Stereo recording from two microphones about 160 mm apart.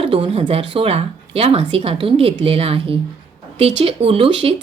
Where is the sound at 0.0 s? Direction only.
35° right (ahead or behind).